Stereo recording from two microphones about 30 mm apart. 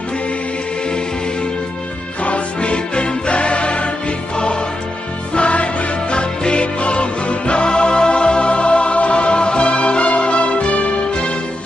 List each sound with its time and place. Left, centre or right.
2.2 s music: left
5.3 s music: left